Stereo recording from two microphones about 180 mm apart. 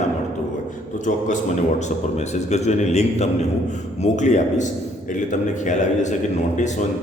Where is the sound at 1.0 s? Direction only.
45° left (ahead or behind).